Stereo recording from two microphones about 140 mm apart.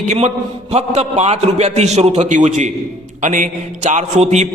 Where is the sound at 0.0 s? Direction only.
55° right (ahead or behind).